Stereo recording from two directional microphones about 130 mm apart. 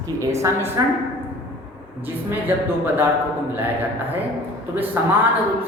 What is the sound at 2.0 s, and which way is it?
Speech, 15° right (ahead or behind).